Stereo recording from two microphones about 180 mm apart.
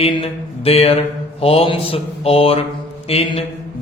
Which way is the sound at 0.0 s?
35° left (ahead or behind).